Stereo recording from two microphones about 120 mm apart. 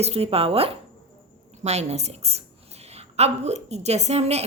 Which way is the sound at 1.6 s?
65° right (ahead or behind).